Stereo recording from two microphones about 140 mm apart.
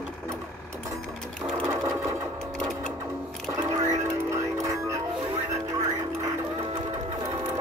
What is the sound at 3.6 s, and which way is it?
Music, 25° right (ahead or behind).